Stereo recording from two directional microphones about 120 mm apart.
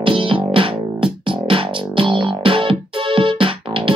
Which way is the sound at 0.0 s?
45° right (ahead or behind).